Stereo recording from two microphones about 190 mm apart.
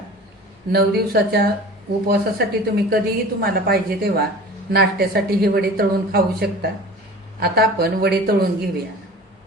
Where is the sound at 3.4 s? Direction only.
50° right (ahead or behind).